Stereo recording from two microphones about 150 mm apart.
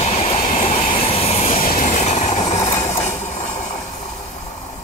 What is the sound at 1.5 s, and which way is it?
Train, 65° left (ahead or behind).